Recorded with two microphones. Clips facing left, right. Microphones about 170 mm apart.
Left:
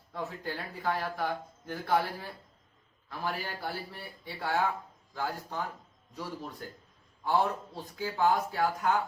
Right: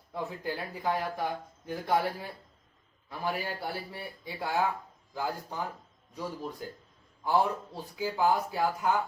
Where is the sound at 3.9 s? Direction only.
10° right (ahead or behind).